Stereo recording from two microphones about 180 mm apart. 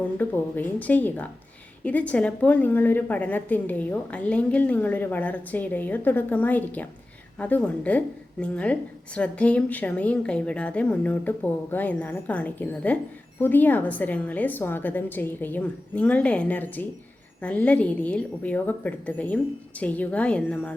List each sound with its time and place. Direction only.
0.0 s a woman's voice: 10° left (ahead or behind)